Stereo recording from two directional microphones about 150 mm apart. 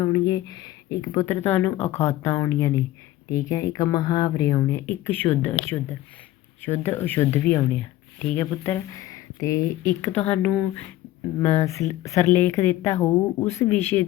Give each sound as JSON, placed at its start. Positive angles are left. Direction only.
{"t": 0.0, "sound": "speech", "side_deg": 25}